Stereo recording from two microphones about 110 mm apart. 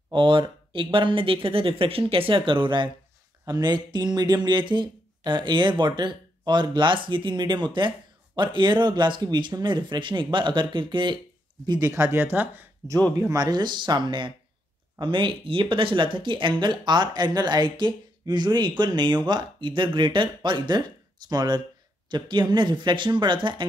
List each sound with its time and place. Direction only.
0.1 s speech: 50° right (ahead or behind)
11.9 s speech: 25° right (ahead or behind)
13.2 s speech: 35° right (ahead or behind)